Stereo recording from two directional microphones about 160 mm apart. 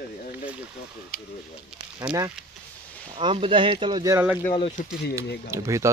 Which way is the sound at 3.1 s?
35° right (ahead or behind).